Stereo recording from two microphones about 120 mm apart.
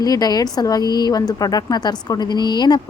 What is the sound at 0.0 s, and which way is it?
A woman's voice, 35° left (ahead or behind).